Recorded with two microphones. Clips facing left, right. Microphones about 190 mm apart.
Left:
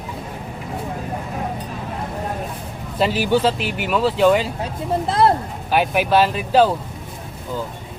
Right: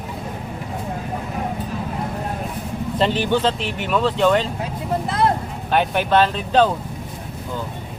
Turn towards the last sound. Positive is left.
turn(degrees=5)  # may be behind; listen again after turning